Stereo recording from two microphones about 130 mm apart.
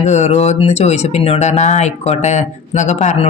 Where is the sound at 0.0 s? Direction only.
60° left (ahead or behind).